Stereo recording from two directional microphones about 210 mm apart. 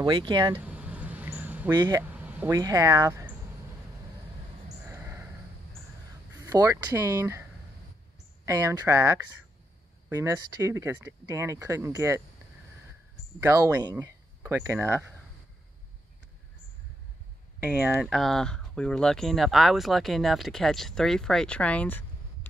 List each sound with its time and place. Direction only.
0.0 s speech: 20° right (ahead or behind)
0.6 s a sound: 5° right (ahead or behind)
1.8 s speech: 15° right (ahead or behind)
4.8 s a sound: 10° right (ahead or behind)
6.4 s speech: 15° right (ahead or behind)
8.5 s speech: 15° right (ahead or behind)
13.4 s speech: 15° right (ahead or behind)
17.6 s speech: 5° right (ahead or behind); by 22.5 s 10° left (ahead or behind)